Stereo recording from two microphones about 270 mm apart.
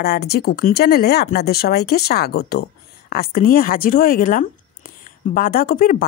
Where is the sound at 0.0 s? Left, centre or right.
Left.